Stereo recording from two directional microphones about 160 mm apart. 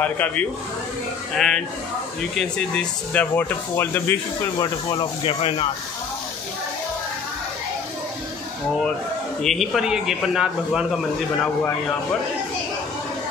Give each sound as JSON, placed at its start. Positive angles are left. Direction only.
{"t": 0.0, "sound": "a man's voice", "side_deg": 10}
{"t": 4.6, "sound": "speech", "side_deg": 30}
{"t": 9.4, "sound": "a man's voice", "side_deg": 0}